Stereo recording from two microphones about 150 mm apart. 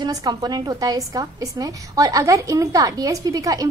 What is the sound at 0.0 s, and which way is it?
A woman's voice, 25° right (ahead or behind).